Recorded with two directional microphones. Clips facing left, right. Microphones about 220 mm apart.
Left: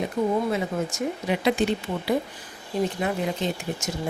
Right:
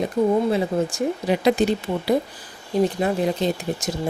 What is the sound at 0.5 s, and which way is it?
A woman's voice, 35° right (ahead or behind).